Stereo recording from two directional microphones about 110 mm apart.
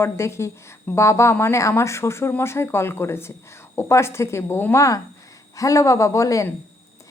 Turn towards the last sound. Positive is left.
turn(degrees=30)  # may be behind; listen again after turning